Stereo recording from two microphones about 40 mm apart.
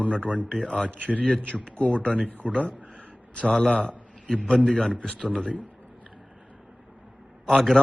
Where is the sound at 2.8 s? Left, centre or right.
Right.